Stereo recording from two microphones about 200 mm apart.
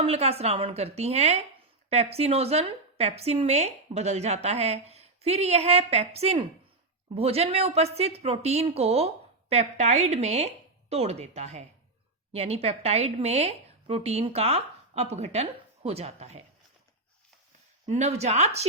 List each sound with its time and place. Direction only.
0.0 s a woman's voice: 30° right (ahead or behind)
17.8 s a woman's voice: 35° right (ahead or behind)